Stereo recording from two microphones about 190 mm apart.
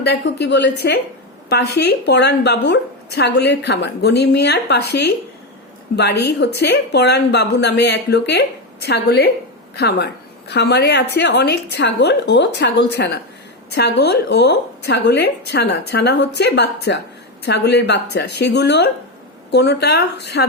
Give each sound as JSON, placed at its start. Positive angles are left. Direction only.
{"t": 0.0, "sound": "a woman's voice", "side_deg": 60}